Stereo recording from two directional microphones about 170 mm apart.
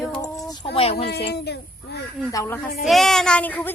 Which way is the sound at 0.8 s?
35° left (ahead or behind).